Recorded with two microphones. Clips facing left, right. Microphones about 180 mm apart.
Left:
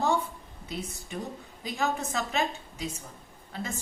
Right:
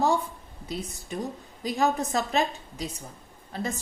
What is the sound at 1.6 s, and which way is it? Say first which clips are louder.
A woman's voice: right 5 dB; 35° right (ahead or behind).